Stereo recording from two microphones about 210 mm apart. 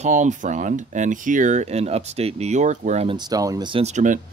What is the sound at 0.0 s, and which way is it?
Speech, 35° right (ahead or behind).